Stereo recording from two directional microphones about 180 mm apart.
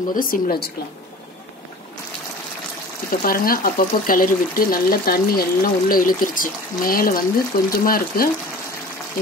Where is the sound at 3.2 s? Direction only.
55° left (ahead or behind).